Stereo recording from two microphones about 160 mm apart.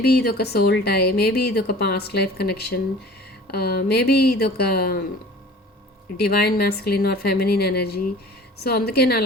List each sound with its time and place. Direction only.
0.0 s speech: 85° left
6.1 s speech: 75° left (ahead or behind)